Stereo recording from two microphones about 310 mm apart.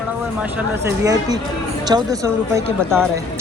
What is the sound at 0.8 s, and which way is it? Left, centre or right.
Speech, centre.